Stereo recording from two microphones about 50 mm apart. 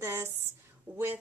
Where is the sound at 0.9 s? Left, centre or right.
Right.